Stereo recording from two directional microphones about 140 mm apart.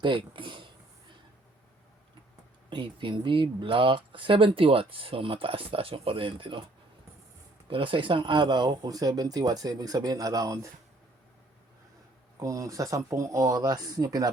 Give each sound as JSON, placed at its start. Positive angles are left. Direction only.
{"t": 0.0, "sound": "speech", "side_deg": -35}
{"t": 2.6, "sound": "speech", "side_deg": -35}
{"t": 7.7, "sound": "speech", "side_deg": -40}
{"t": 12.4, "sound": "speech", "side_deg": -25}